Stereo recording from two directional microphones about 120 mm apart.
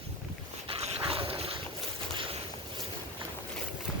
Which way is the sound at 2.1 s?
50° right (ahead or behind).